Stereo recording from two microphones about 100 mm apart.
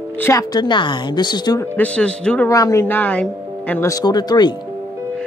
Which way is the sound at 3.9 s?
40° left (ahead or behind).